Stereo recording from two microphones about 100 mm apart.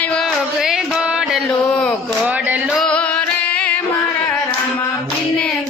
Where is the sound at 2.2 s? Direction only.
15° right (ahead or behind).